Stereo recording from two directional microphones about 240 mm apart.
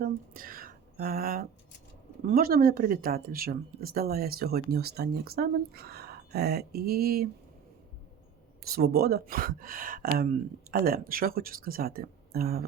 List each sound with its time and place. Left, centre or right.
0.0 s a sound: right
2.2 s speech: right
8.6 s speech: right